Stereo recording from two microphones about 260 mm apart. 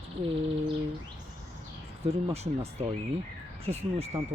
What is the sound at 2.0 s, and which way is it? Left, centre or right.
Speech, right.